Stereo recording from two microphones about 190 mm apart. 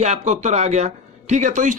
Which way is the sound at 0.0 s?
35° right (ahead or behind).